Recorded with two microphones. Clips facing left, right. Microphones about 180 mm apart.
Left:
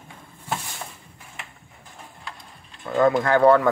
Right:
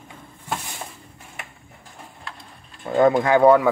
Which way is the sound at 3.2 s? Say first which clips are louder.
Even; 10° right (ahead or behind).